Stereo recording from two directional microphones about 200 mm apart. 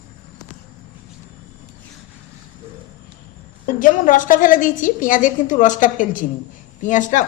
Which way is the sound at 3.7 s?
45° left (ahead or behind).